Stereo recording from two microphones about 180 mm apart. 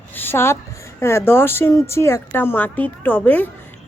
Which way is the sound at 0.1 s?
10° left (ahead or behind).